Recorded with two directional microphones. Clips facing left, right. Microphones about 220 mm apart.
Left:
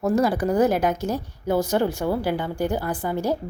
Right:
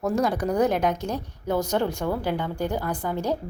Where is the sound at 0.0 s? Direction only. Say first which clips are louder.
Left 3 dB; 5° left (ahead or behind).